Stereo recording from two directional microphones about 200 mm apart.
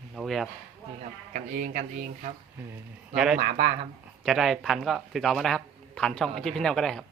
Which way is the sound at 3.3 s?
40° right (ahead or behind).